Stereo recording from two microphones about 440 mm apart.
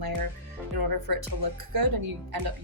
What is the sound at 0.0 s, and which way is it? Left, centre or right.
Music, right.